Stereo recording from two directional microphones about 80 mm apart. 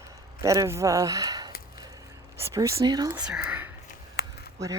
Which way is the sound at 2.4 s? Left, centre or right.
Right.